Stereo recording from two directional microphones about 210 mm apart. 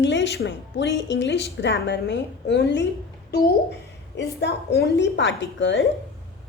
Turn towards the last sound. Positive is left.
turn(degrees=60)  # may be behind; listen again after turning